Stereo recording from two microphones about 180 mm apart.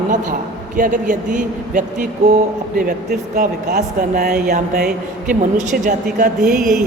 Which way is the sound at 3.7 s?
45° right (ahead or behind).